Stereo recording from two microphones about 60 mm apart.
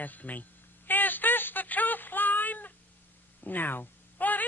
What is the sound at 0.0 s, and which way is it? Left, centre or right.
Speech, left.